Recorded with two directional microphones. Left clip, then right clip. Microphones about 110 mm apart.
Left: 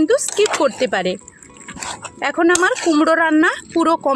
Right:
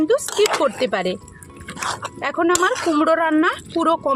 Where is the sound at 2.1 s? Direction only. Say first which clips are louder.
Left 4 dB; 70° left (ahead or behind).